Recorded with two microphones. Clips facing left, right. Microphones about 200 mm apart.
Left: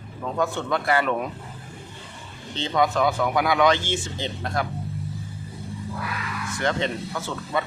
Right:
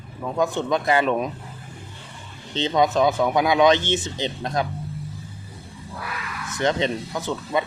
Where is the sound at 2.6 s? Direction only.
20° right (ahead or behind).